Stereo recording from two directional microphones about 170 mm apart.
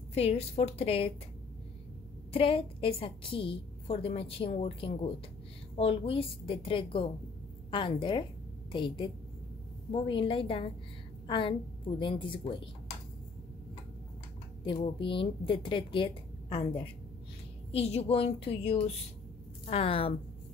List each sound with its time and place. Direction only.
0.1 s a woman's voice: 35° left (ahead or behind)
2.3 s a woman's voice: 35° left (ahead or behind)
14.6 s a woman's voice: 30° left (ahead or behind)